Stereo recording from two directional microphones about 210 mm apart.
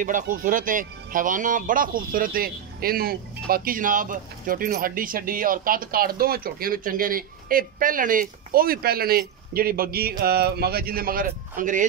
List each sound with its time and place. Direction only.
0.0 s speech: 40° right (ahead or behind)